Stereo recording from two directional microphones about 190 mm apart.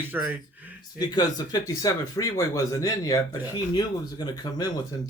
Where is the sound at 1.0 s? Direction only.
20° left (ahead or behind).